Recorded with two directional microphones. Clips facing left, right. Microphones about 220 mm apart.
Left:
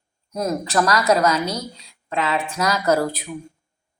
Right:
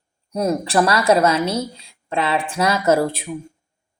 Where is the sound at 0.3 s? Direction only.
30° right (ahead or behind).